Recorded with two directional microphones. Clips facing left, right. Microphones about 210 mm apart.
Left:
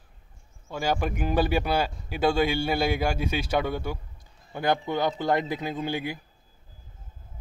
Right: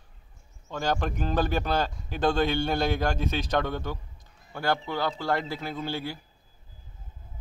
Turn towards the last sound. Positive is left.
turn(degrees=15)  # may be behind; listen again after turning